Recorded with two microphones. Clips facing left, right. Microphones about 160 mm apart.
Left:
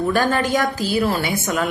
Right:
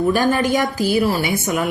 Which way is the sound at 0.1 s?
10° right (ahead or behind).